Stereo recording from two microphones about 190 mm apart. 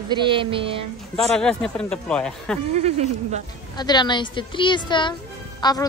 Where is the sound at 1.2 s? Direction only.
5° left (ahead or behind).